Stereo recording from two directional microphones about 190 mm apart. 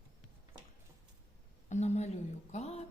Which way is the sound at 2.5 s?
35° left (ahead or behind).